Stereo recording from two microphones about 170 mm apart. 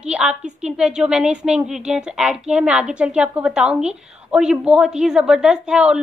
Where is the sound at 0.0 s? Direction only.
5° right (ahead or behind).